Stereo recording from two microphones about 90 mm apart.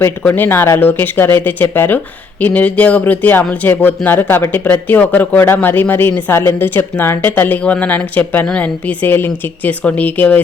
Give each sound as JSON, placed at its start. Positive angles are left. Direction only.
{"t": 0.2, "sound": "a woman's voice", "side_deg": 20}